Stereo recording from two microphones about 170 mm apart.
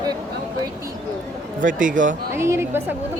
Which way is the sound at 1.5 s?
50° right (ahead or behind).